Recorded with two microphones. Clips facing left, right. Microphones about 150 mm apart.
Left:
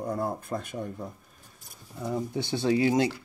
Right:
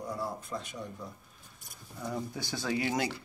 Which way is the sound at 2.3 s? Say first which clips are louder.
Left 8 dB; 25° left (ahead or behind).